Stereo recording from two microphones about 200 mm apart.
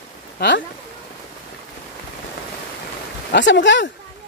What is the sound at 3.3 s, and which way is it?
Speech, 65° left (ahead or behind).